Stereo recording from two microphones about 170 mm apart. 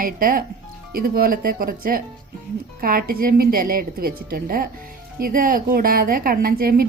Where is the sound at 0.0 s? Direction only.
55° right (ahead or behind).